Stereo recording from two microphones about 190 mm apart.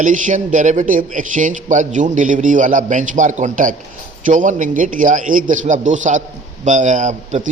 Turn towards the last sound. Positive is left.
turn(degrees=-40)  # may be behind; listen again after turning